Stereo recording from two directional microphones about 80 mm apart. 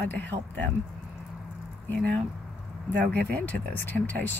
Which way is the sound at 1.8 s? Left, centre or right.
Centre.